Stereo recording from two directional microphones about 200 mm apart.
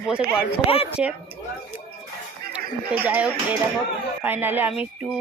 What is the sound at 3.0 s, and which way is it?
Speech, 10° right (ahead or behind).